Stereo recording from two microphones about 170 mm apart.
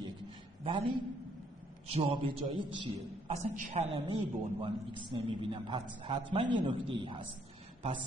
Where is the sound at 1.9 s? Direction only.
35° right (ahead or behind).